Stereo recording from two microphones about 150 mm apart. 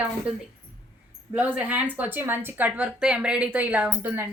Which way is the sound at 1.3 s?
10° right (ahead or behind).